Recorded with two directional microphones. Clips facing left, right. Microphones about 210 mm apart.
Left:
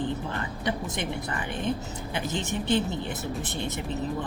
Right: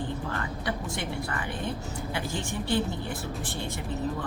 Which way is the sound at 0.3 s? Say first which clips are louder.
Left 2 dB; 20° left (ahead or behind).